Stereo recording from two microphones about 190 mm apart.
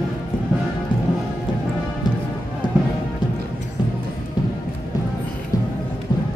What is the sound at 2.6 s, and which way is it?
Music, 25° left (ahead or behind).